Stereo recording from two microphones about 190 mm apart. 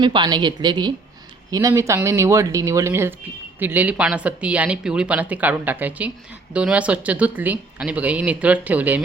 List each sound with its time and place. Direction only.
0.0 s a woman's voice: 25° right (ahead or behind); by 9.0 s 10° right (ahead or behind)